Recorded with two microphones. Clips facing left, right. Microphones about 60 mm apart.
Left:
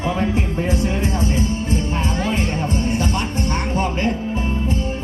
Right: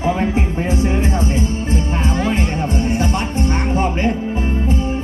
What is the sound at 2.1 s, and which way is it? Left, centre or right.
Music, right.